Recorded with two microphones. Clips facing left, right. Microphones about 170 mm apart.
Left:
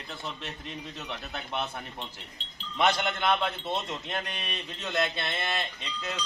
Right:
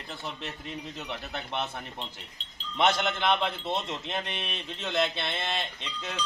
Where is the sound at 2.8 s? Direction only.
Centre (ahead or behind).